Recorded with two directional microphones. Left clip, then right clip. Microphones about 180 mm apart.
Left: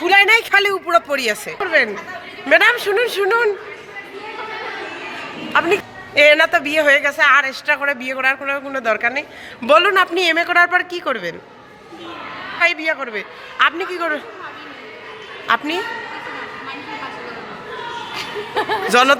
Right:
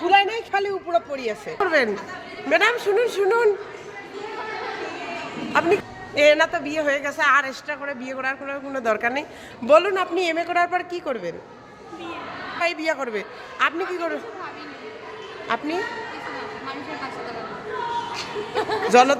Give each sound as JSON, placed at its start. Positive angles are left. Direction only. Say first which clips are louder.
{"t": 0.0, "sound": "a sound", "louder": "left 6 dB", "side_deg": 25}
{"t": 1.5, "sound": "a woman's voice", "louder": "left 3 dB", "side_deg": -25}
{"t": 2.5, "sound": "a man's voice", "louder": "left 6 dB", "side_deg": 0}
{"t": 5.5, "sound": "a man's voice", "louder": "left 4 dB", "side_deg": 0}
{"t": 7.7, "sound": "a man's voice", "louder": "left 11 dB", "side_deg": 5}
{"t": 8.7, "sound": "a man's voice", "louder": "left 2 dB", "side_deg": -10}
{"t": 9.6, "sound": "a man's voice", "louder": "left 4 dB", "side_deg": 5}
{"t": 12.5, "sound": "a man's voice", "louder": "left 6 dB", "side_deg": -5}
{"t": 13.6, "sound": "a man's voice", "louder": "left 6 dB", "side_deg": 0}
{"t": 15.4, "sound": "a man's voice", "louder": "left 7 dB", "side_deg": 0}
{"t": 18.1, "sound": "chuckle", "louder": "left 4 dB", "side_deg": 45}
{"t": 18.9, "sound": "a man's voice", "louder": "left 2 dB", "side_deg": 0}